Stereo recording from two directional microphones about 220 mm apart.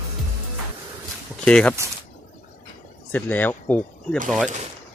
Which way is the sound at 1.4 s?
5° left (ahead or behind).